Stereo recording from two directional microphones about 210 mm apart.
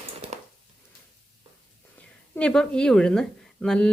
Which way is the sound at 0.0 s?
30° right (ahead or behind).